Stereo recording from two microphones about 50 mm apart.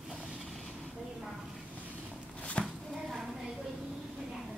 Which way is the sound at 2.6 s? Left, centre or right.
Centre.